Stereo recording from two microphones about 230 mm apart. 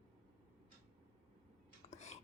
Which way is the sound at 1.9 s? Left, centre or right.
Left.